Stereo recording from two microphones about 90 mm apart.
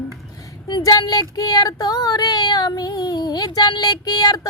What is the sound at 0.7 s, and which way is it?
Child singing, 55° left (ahead or behind).